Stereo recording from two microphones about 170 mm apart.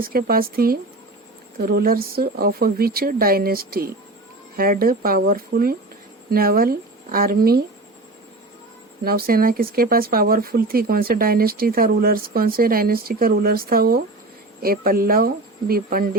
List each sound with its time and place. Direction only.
0.0 s speech: 60° right (ahead or behind)
9.0 s speech: 60° right (ahead or behind)